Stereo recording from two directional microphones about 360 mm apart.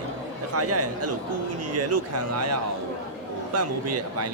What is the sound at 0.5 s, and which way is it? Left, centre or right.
A man's voice, right.